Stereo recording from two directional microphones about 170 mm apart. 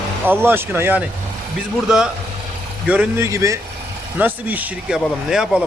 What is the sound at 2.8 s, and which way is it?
Speech, 5° right (ahead or behind).